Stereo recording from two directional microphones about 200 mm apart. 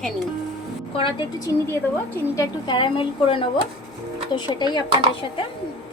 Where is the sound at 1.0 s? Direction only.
25° left (ahead or behind).